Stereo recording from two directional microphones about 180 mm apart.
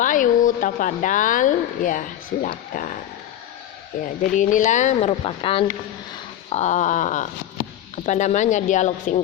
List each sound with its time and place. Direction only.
0.0 s a woman's voice: 45° left (ahead or behind)